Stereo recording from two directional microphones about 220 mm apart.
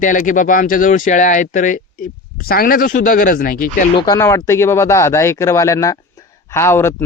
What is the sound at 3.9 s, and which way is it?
Speech, 15° left (ahead or behind).